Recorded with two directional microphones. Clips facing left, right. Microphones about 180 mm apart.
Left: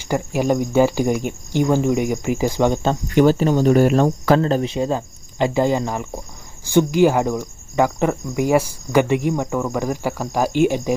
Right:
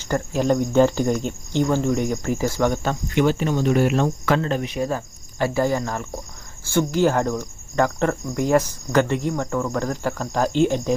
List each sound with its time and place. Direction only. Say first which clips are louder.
0.0 s cricket: left 2 dB; 10° left (ahead or behind)
2.9 s speech: left 5 dB; 40° left (ahead or behind); by 6.2 s 15° left (ahead or behind)
6.7 s cricket: left 4 dB; 15° left (ahead or behind)